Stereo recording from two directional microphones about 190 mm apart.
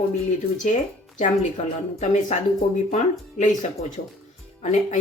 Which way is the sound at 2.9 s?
40° left (ahead or behind).